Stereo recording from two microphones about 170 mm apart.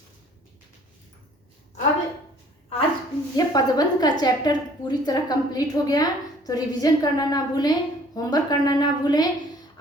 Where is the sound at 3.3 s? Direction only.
20° left (ahead or behind).